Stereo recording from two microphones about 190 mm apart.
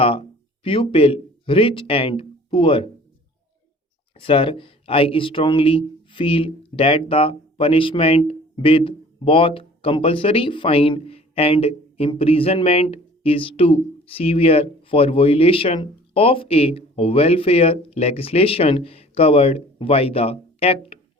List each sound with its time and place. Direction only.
0.0 s speech: 30° left (ahead or behind)
4.2 s speech: 30° left (ahead or behind)